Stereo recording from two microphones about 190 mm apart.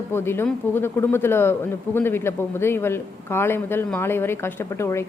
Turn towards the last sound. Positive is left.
turn(degrees=15)  # may be behind; listen again after turning